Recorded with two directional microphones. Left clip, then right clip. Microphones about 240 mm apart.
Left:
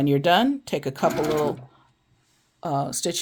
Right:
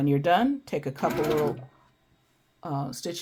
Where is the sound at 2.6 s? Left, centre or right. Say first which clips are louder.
Left 7 dB; left.